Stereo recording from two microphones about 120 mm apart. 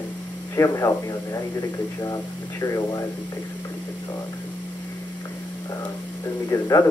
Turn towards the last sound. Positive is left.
turn(degrees=30)  # may be behind; listen again after turning